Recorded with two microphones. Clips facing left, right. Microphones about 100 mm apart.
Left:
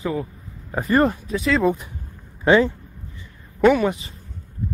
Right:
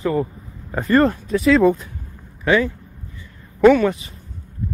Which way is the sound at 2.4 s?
30° left (ahead or behind).